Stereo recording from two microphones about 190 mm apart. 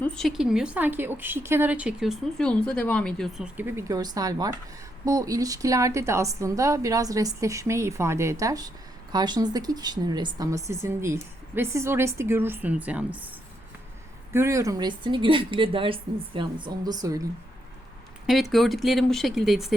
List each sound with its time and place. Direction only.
0.0 s speech: 5° left (ahead or behind)
14.3 s a woman's voice: 15° right (ahead or behind)
18.3 s speech: centre (ahead or behind)